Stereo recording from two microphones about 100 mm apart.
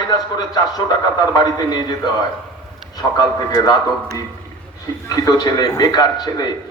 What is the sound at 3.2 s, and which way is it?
Speech, 40° left (ahead or behind).